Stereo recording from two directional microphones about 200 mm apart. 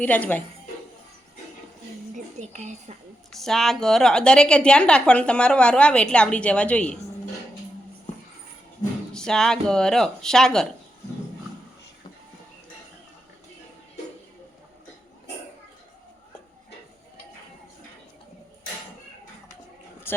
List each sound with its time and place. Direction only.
0.0 s speech: 5° left (ahead or behind)
2.1 s a woman's voice: 35° right (ahead or behind)
3.3 s a woman's voice: centre (ahead or behind)
9.1 s a woman's voice: 5° left (ahead or behind)
20.1 s speech: 10° left (ahead or behind)